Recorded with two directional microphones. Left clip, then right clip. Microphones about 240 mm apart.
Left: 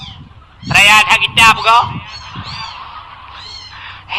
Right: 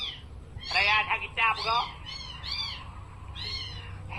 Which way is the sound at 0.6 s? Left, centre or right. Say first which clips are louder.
Left 17 dB; left.